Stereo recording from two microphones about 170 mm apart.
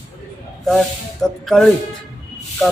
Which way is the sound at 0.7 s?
Centre (ahead or behind).